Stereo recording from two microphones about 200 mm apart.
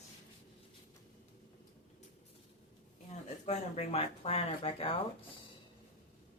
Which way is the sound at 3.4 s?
30° left (ahead or behind).